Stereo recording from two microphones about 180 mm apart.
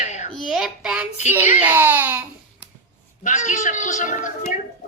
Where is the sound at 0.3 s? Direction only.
Centre (ahead or behind).